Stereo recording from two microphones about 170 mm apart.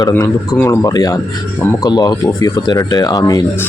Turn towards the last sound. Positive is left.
turn(degrees=20)  # may be behind; listen again after turning